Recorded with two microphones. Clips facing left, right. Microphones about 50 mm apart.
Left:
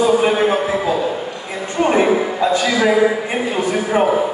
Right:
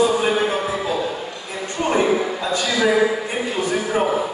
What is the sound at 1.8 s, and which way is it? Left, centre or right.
A man's voice, left.